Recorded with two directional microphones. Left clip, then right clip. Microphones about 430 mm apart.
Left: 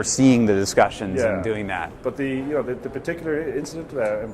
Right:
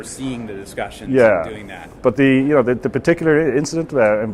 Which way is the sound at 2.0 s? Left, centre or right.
Right.